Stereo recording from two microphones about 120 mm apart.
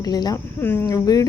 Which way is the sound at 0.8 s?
30° left (ahead or behind).